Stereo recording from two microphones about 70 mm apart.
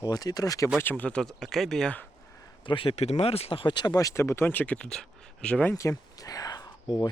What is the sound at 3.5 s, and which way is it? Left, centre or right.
Speech, left.